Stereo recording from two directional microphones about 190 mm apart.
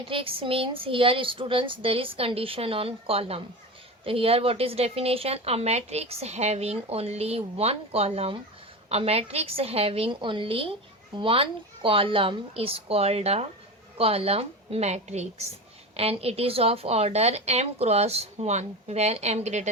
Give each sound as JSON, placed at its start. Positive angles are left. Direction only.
{"t": 0.0, "sound": "a woman's voice", "side_deg": -30}